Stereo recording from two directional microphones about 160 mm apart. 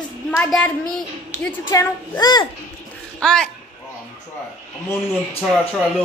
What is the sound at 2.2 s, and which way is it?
Speech, 25° left (ahead or behind).